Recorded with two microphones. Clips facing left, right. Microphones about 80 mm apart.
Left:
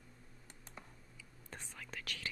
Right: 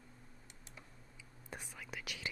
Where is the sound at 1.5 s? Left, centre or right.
Centre.